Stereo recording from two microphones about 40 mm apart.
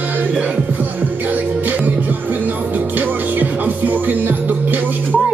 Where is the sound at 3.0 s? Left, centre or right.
Right.